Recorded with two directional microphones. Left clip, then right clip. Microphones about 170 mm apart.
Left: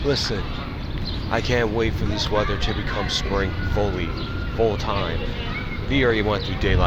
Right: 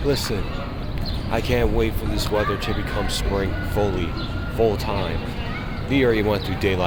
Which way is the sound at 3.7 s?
20° right (ahead or behind).